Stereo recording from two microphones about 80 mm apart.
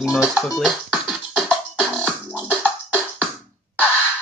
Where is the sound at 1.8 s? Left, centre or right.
Centre.